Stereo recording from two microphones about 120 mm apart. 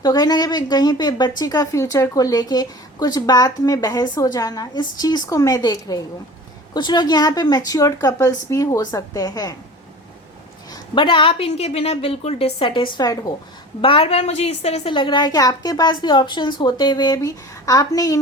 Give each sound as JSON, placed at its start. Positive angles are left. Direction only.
{"t": 0.0, "sound": "a woman's voice", "side_deg": 35}
{"t": 10.7, "sound": "a woman's voice", "side_deg": 40}
{"t": 13.8, "sound": "a woman's voice", "side_deg": 50}
{"t": 14.9, "sound": "a woman's voice", "side_deg": 40}